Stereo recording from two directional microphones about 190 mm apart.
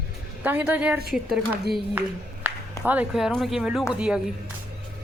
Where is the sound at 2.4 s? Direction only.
10° right (ahead or behind).